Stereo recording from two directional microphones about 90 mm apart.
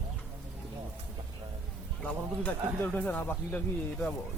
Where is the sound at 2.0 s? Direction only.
15° left (ahead or behind).